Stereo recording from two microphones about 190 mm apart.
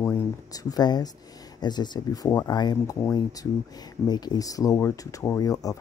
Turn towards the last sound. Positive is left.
turn(degrees=20)  # may be behind; listen again after turning